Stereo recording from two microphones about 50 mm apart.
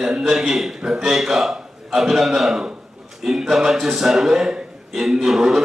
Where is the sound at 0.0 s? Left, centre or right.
Centre.